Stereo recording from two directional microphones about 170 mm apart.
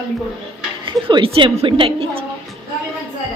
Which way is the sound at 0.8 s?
30° right (ahead or behind).